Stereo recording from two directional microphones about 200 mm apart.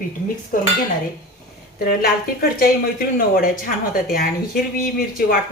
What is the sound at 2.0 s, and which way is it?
Speech, 50° left (ahead or behind).